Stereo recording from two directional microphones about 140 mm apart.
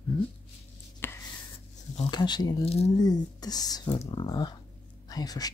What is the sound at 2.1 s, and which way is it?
Speech, 30° left (ahead or behind).